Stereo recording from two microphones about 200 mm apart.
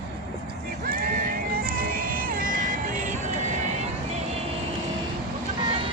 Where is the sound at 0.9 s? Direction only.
45° right (ahead or behind).